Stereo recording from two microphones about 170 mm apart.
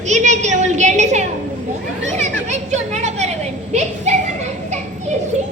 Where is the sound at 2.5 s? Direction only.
40° right (ahead or behind).